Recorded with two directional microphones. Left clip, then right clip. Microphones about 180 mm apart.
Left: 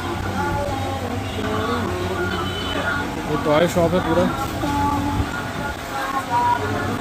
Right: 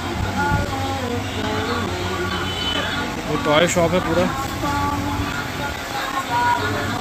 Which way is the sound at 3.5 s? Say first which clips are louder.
Right 1 dB; 5° left (ahead or behind).